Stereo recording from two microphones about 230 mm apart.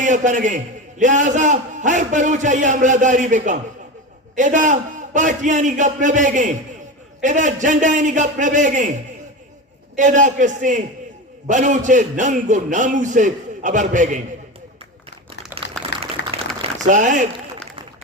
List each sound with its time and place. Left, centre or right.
0.0 s a man's voice: right
15.5 s pour: centre
16.2 s applause: left
16.8 s a man's voice: right